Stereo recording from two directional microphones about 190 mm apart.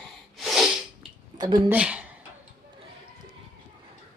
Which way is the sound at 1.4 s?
25° right (ahead or behind).